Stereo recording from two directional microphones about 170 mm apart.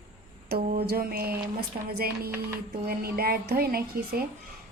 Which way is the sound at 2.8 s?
65° right (ahead or behind).